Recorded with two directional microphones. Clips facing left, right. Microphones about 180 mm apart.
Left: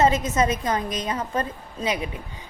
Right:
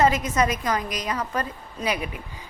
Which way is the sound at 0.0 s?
25° left (ahead or behind).